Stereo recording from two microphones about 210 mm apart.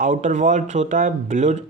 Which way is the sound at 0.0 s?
35° right (ahead or behind).